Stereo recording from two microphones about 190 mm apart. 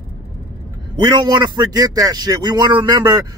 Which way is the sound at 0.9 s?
25° right (ahead or behind).